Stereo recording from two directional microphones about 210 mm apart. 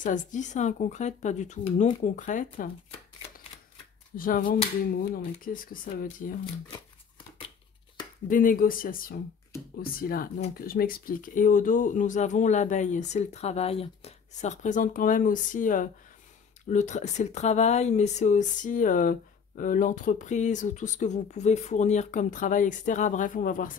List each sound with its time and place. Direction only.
0.0 s speech: 35° left (ahead or behind)
4.2 s speech: 40° left (ahead or behind)
8.3 s speech: 40° left (ahead or behind)